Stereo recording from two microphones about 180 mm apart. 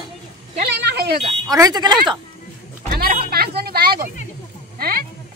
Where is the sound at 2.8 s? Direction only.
55° right (ahead or behind).